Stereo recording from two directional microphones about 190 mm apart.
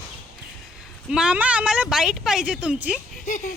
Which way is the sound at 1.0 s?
5° right (ahead or behind).